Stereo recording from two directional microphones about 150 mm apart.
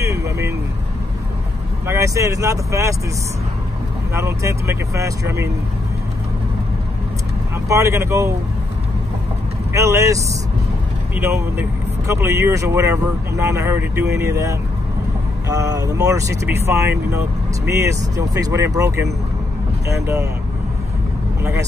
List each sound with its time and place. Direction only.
0.0 s vehicle: 20° right (ahead or behind)
1.9 s speech: 20° right (ahead or behind)
4.1 s speech: 20° right (ahead or behind)
7.6 s speech: 20° right (ahead or behind)
9.7 s speech: 20° right (ahead or behind)
12.1 s speech: 20° right (ahead or behind)